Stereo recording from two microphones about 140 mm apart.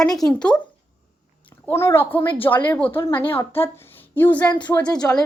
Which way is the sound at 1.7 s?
20° left (ahead or behind).